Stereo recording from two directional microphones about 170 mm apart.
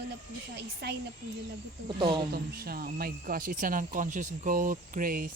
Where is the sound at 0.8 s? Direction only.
80° right.